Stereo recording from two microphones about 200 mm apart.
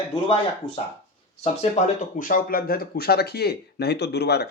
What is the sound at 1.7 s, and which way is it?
Speech, 40° left (ahead or behind).